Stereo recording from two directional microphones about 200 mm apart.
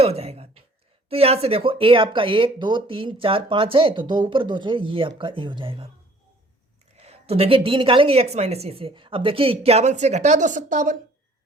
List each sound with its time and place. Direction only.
0.0 s a sound: 30° right (ahead or behind)
1.1 s speech: 30° right (ahead or behind)
6.9 s speech: 30° right (ahead or behind)